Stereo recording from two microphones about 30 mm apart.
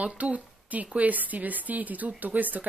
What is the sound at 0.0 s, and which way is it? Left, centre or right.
A woman's voice, right.